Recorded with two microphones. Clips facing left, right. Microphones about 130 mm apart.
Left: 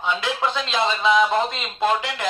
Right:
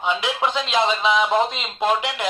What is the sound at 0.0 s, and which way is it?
Speech, 20° right (ahead or behind).